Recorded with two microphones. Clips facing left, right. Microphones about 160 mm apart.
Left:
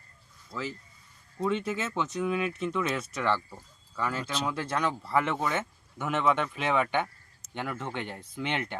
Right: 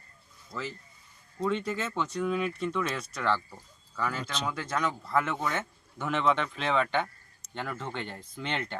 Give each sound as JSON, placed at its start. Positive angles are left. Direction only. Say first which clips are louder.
{"t": 1.4, "sound": "speech", "louder": "left 1 dB", "side_deg": 5}
{"t": 4.6, "sound": "speech", "louder": "even", "side_deg": 30}
{"t": 5.0, "sound": "speech", "louder": "left 1 dB", "side_deg": 10}